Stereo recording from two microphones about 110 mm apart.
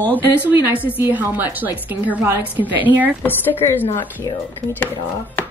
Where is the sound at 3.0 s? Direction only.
15° left (ahead or behind).